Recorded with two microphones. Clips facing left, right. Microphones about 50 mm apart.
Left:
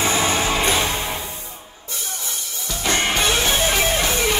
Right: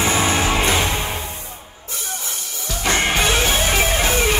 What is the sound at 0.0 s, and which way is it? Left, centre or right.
Music, right.